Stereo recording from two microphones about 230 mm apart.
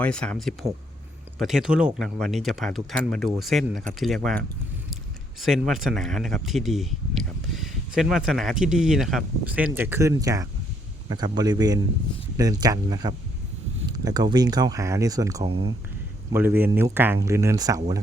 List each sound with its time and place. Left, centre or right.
0.0 s speech: centre